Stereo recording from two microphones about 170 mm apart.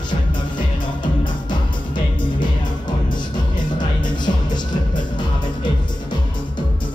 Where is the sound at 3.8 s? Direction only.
25° left (ahead or behind).